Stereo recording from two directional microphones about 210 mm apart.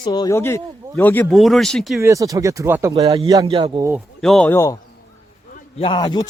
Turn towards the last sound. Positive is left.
turn(degrees=20)  # may be behind; listen again after turning